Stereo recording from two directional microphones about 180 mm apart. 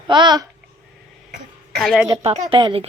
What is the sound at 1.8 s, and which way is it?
Speech, centre (ahead or behind).